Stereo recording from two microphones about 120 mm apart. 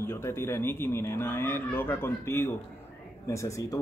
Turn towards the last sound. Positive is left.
turn(degrees=25)  # may be behind; listen again after turning